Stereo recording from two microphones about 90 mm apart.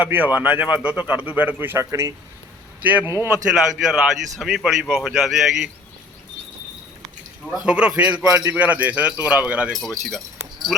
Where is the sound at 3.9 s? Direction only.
5° right (ahead or behind).